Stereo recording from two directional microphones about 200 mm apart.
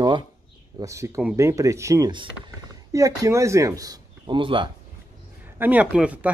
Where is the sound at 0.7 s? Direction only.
15° right (ahead or behind).